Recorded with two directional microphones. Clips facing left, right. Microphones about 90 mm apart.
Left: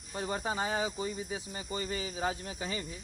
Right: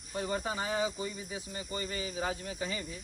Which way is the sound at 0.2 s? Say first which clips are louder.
Left 1 dB; 25° left (ahead or behind).